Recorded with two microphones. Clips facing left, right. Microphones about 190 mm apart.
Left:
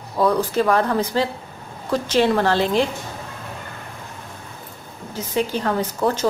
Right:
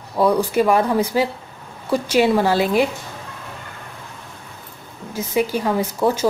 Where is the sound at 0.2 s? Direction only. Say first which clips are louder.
Right 2 dB; 10° right (ahead or behind).